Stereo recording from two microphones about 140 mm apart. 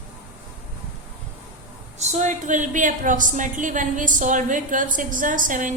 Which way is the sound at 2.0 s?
55° right (ahead or behind).